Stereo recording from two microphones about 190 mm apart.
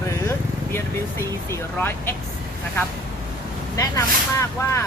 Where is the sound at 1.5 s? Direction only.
10° left (ahead or behind).